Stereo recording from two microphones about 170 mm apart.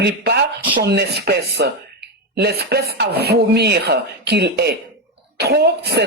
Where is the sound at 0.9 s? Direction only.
70° right (ahead or behind).